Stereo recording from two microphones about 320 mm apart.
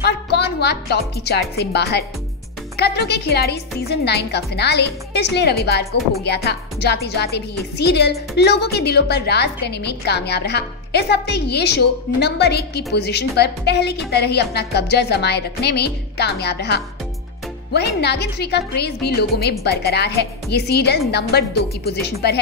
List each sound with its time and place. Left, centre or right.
0.0 s a woman's voice: left
6.9 s a woman's voice: left